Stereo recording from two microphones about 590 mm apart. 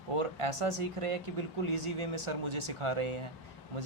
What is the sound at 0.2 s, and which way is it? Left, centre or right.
Speech, right.